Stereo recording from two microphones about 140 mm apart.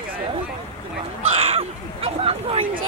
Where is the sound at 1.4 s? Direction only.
45° right (ahead or behind).